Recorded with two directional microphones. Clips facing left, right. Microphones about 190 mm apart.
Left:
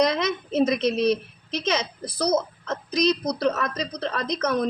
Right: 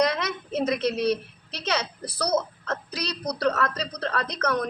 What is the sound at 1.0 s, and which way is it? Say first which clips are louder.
Speech: left 3 dB; 15° left (ahead or behind).